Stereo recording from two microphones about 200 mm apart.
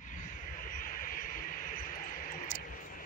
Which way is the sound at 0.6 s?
45° left (ahead or behind).